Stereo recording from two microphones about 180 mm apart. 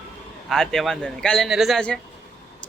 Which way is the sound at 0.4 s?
Centre (ahead or behind).